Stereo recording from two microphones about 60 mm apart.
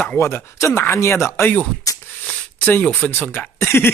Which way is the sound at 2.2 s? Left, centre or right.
Centre.